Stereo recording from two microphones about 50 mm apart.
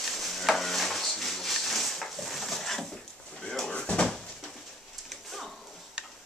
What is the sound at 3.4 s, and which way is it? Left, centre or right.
Drawer open or close, centre.